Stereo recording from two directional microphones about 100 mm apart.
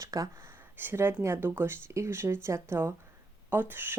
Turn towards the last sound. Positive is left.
turn(degrees=-20)  # may be behind; listen again after turning